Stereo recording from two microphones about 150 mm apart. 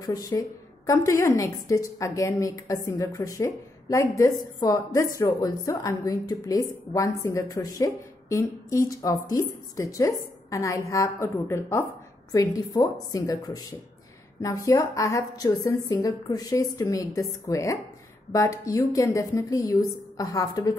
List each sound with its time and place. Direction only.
0.0 s a woman's voice: 25° left (ahead or behind)